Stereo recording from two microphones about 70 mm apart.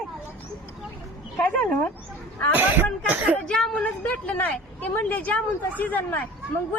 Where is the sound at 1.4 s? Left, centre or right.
Left.